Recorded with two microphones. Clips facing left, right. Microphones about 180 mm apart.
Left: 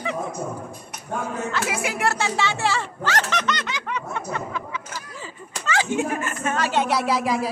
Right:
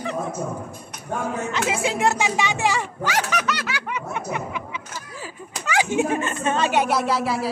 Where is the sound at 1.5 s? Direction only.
25° right (ahead or behind).